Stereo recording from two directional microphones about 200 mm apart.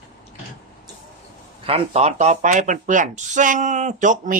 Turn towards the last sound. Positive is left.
turn(degrees=-40)  # may be behind; listen again after turning